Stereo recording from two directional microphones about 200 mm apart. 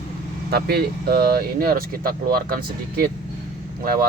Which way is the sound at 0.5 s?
50° right (ahead or behind).